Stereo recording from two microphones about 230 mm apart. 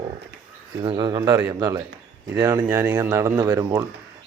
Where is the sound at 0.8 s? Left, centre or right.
Centre.